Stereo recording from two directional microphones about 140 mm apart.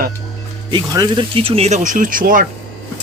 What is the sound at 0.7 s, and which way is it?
Speech, 30° right (ahead or behind).